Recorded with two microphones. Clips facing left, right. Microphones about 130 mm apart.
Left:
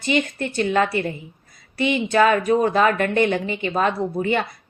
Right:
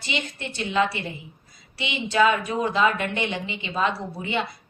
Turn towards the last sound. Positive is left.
turn(degrees=50)  # may be behind; listen again after turning